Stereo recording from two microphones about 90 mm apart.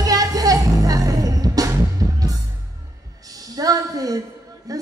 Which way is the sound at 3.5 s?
40° right (ahead or behind).